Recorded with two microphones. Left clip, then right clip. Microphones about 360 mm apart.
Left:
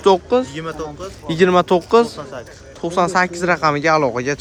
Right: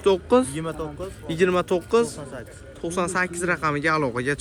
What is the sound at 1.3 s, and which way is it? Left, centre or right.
Speech, centre.